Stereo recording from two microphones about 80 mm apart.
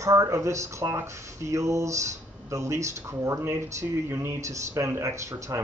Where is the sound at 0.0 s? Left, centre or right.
Right.